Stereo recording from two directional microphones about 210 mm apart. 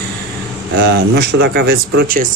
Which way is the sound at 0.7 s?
50° right (ahead or behind).